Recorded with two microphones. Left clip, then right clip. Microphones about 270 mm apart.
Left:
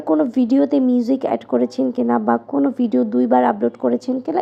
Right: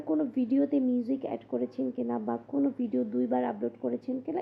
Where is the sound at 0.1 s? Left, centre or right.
Centre.